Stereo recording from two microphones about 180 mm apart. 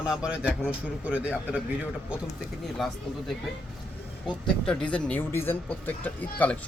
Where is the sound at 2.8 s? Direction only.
Centre (ahead or behind).